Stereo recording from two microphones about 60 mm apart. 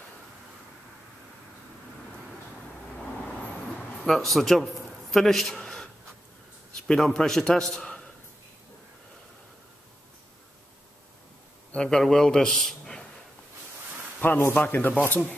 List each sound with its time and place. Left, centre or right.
3.3 s vehicle: centre
4.1 s a man's voice: centre
6.9 s a man's voice: centre
11.7 s a man's voice: centre
14.2 s a man's voice: left